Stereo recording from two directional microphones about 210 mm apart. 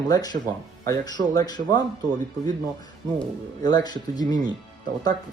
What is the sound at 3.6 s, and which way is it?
Speech, 20° left (ahead or behind).